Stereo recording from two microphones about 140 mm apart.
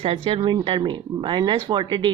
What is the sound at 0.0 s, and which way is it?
A woman's voice, 40° right (ahead or behind).